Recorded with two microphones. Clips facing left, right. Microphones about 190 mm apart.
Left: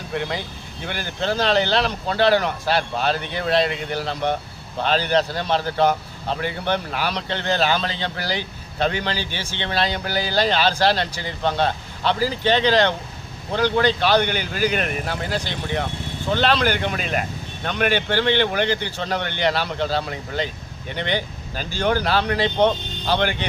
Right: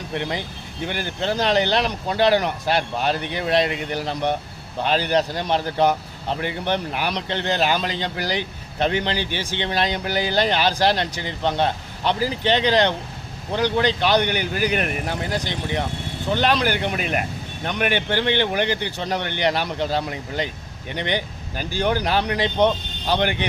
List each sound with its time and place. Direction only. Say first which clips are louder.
1.0 s a man's voice: left 1 dB; 15° right (ahead or behind)